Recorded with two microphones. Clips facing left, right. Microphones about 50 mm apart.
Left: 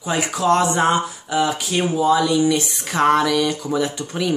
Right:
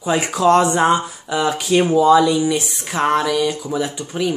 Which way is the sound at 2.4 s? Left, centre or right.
Centre.